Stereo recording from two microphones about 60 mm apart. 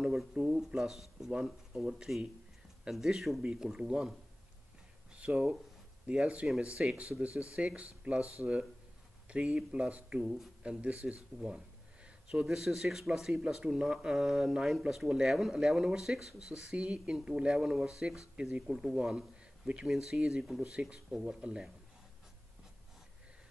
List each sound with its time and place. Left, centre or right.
0.0 s speech: centre
5.1 s speech: centre
8.2 s speech: left
9.3 s speech: centre
10.2 s speech: centre
10.6 s a man's voice: centre
20.7 s speech: centre
21.1 s speech: centre
21.4 s speech: centre